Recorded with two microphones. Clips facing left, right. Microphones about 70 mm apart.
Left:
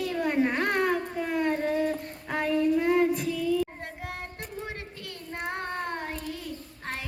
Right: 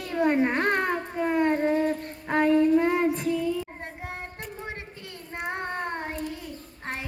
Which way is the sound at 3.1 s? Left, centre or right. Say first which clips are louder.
Right 3 dB; right.